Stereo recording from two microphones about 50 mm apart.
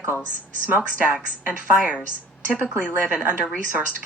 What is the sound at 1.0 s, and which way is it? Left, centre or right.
Speech, right.